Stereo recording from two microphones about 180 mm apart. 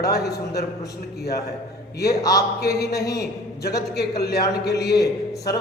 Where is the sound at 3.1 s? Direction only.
65° left (ahead or behind).